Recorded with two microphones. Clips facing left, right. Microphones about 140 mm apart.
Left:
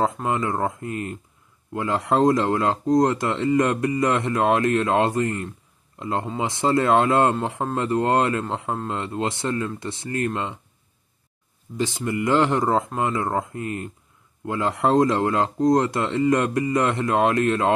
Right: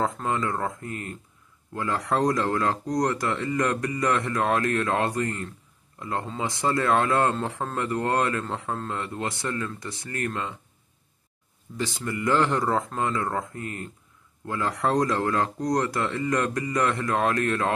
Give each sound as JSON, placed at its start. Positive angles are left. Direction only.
{"t": 0.0, "sound": "a man's voice", "side_deg": 20}
{"t": 11.7, "sound": "a man's voice", "side_deg": 20}